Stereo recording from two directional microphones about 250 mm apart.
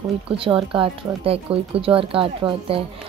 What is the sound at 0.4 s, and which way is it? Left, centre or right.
Speech, right.